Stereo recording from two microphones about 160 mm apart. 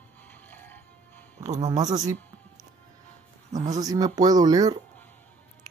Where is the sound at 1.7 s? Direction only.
25° right (ahead or behind).